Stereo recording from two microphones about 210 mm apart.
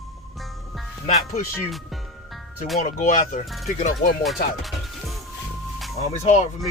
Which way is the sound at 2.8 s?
40° left (ahead or behind).